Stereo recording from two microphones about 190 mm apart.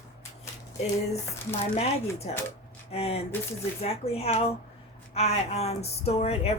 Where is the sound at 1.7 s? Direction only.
35° left (ahead or behind).